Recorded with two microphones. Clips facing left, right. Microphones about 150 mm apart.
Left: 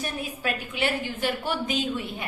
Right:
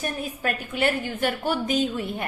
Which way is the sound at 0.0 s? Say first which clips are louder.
Right 2 dB; 45° right (ahead or behind).